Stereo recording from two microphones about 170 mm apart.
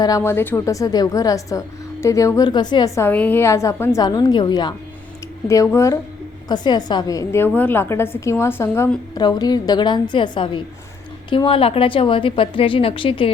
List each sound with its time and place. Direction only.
0.0 s a woman's voice: 15° left (ahead or behind)